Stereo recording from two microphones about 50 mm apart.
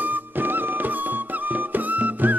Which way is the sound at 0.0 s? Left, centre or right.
Right.